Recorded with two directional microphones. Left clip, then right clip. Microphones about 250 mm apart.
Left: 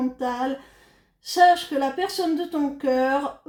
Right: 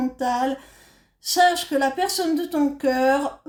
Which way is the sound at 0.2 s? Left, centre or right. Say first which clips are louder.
Right 3 dB; right.